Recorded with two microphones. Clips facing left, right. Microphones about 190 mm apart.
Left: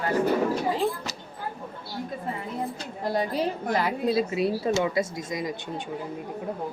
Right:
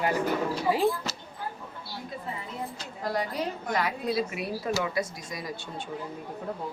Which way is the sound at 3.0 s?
25° left (ahead or behind).